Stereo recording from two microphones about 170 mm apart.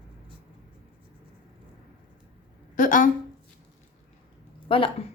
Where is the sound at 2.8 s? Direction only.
50° left (ahead or behind).